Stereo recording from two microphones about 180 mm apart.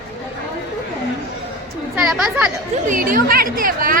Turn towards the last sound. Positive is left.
turn(degrees=-50)  # may be behind; listen again after turning